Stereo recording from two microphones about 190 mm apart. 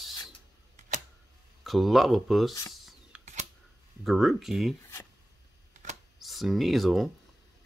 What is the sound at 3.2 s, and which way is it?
Camera, 35° right (ahead or behind).